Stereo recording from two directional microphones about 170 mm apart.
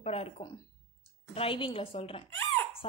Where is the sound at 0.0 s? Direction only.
35° left (ahead or behind).